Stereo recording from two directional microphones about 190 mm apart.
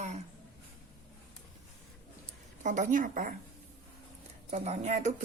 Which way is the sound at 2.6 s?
40° right (ahead or behind).